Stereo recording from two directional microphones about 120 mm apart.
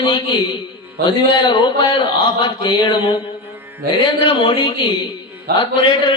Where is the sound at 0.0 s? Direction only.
45° left (ahead or behind).